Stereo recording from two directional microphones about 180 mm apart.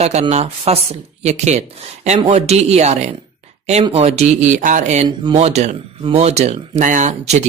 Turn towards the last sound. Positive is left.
turn(degrees=-40)  # may be behind; listen again after turning